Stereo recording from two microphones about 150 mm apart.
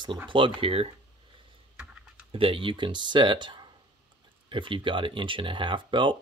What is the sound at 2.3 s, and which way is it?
Speech, 35° right (ahead or behind).